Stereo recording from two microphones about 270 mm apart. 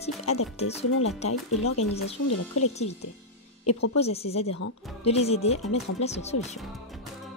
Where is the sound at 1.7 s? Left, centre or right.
Left.